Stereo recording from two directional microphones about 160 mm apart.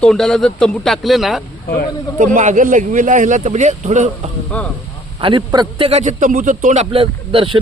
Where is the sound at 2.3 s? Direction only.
50° right (ahead or behind).